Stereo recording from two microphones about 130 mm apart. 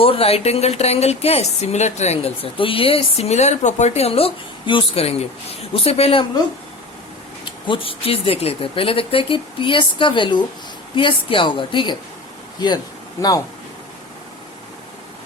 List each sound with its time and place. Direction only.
0.0 s speech: 45° left (ahead or behind)
7.4 s a woman's voice: 40° left (ahead or behind)
13.2 s speech: 25° left (ahead or behind)